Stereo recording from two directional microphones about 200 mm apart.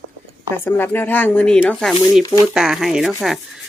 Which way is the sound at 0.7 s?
10° left (ahead or behind).